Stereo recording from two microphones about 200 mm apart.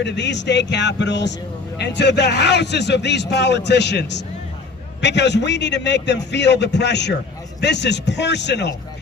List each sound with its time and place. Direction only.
0.0 s a man's voice: 60° left (ahead or behind)